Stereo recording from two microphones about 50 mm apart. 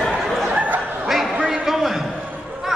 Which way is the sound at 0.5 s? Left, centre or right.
Right.